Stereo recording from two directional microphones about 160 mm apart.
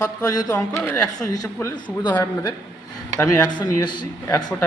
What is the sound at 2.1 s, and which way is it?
Speech, 15° left (ahead or behind).